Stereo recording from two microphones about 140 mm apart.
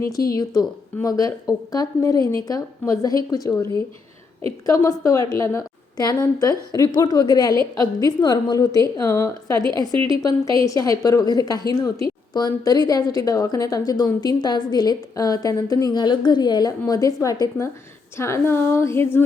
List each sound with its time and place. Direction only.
0.0 s a woman's voice: 25° left (ahead or behind)